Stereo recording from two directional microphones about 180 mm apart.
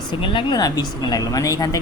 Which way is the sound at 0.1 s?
25° left (ahead or behind).